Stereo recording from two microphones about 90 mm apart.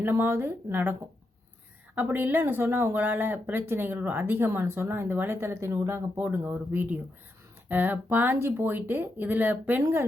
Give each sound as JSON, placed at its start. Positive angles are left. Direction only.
{"t": 0.0, "sound": "speech", "side_deg": -25}
{"t": 2.0, "sound": "speech", "side_deg": -20}